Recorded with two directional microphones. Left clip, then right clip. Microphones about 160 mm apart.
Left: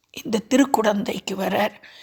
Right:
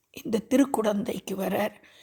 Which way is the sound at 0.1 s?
5° right (ahead or behind).